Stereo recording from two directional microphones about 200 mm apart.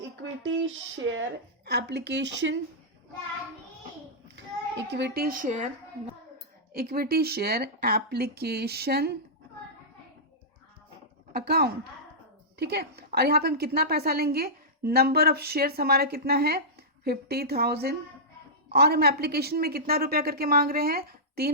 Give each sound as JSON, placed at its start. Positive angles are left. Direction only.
{"t": 1.6, "sound": "speech", "side_deg": -55}
{"t": 4.4, "sound": "a child's voice", "side_deg": -60}
{"t": 6.7, "sound": "a woman's voice", "side_deg": -50}
{"t": 11.3, "sound": "a woman's voice", "side_deg": -50}